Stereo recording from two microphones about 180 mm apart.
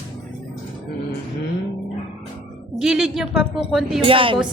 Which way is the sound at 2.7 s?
5° right (ahead or behind).